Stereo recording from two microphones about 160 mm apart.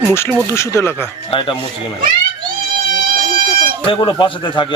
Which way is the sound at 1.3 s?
35° left (ahead or behind).